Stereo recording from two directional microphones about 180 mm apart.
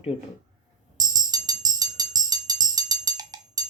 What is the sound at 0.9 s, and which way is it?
Music, 20° right (ahead or behind).